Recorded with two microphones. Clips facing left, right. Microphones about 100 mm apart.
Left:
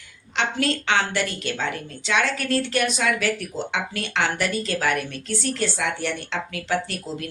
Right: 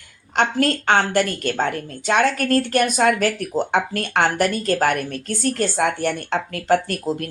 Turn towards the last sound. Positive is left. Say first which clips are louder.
# right 5 dB
turn(degrees=-50)  # may be behind; listen again after turning